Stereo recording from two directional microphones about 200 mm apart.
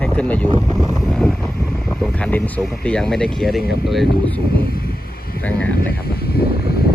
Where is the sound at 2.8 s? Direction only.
5° left (ahead or behind).